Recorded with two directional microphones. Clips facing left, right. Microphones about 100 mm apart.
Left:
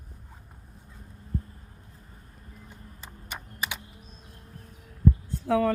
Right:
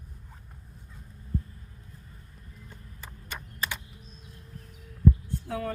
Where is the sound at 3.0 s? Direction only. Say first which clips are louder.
Even; 15° left (ahead or behind).